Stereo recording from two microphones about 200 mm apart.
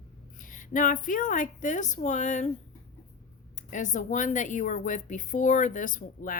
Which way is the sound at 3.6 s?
40° left (ahead or behind).